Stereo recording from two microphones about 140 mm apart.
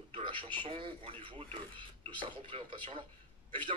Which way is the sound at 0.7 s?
40° right (ahead or behind).